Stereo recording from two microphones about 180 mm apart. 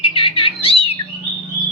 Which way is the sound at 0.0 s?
30° left (ahead or behind).